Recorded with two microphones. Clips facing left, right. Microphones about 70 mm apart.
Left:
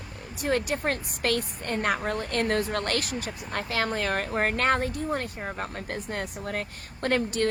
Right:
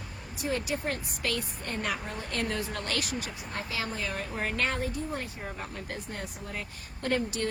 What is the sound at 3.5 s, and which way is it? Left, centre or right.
A woman's voice, left.